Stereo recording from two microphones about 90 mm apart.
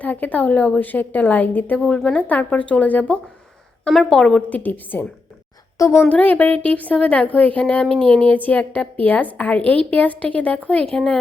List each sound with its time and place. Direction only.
0.0 s a woman's voice: 20° left (ahead or behind)
5.7 s a woman's voice: 35° left (ahead or behind)
6.1 s a woman's voice: 15° left (ahead or behind)